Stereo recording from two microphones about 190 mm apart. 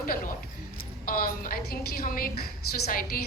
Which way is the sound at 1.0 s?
50° left (ahead or behind).